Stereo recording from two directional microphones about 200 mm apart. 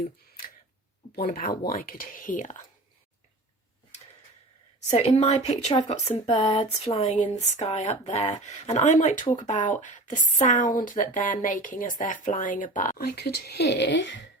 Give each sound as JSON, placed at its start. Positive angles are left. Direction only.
{"t": 1.1, "sound": "speech", "side_deg": 50}
{"t": 4.9, "sound": "speech", "side_deg": 30}